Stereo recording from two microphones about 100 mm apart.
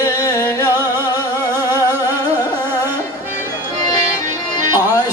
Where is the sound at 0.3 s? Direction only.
35° left (ahead or behind).